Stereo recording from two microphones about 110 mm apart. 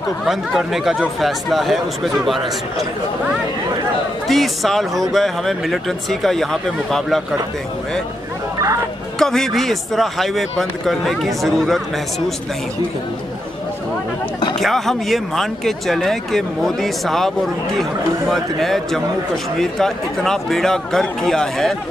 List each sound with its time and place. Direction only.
0.2 s a man's voice: 5° right (ahead or behind)
4.3 s a man's voice: centre (ahead or behind)
9.2 s a man's voice: 5° left (ahead or behind)
14.6 s a man's voice: centre (ahead or behind)